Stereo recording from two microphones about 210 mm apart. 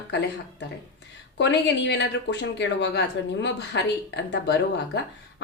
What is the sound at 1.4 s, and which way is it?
Speech, 55° left (ahead or behind).